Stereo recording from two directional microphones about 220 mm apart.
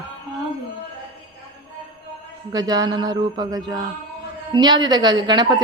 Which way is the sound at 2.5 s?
15° right (ahead or behind).